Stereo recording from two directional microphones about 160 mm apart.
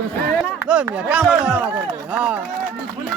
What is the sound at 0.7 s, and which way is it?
Speech, 5° right (ahead or behind).